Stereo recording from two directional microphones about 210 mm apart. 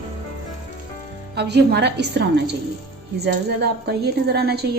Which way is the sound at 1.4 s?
50° right (ahead or behind).